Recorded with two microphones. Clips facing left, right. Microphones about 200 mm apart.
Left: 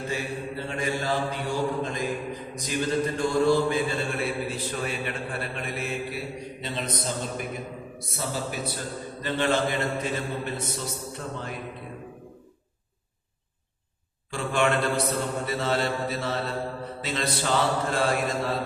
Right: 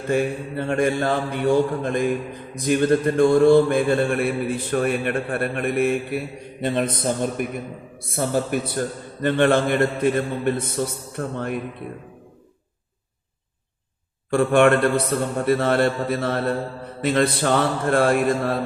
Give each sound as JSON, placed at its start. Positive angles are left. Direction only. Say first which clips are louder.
{"t": 0.1, "sound": "mantra", "louder": "right 14 dB", "side_deg": -55}
{"t": 14.3, "sound": "mantra", "louder": "right 9 dB", "side_deg": -55}